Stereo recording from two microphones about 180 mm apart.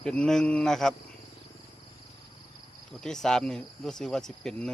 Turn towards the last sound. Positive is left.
turn(degrees=5)  # may be behind; listen again after turning